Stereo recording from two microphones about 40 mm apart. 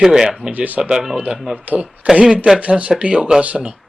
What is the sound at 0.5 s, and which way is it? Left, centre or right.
Speech, right.